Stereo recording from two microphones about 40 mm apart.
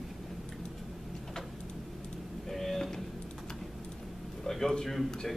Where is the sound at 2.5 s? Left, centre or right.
Centre.